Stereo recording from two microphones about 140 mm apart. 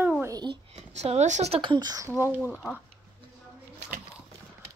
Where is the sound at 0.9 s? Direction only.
50° right (ahead or behind).